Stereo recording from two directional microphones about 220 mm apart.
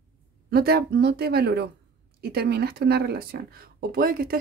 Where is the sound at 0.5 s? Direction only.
45° right (ahead or behind).